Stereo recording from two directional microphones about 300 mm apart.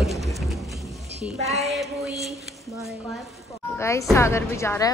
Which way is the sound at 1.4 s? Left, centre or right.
Right.